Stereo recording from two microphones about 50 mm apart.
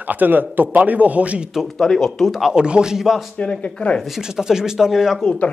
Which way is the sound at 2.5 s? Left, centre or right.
Centre.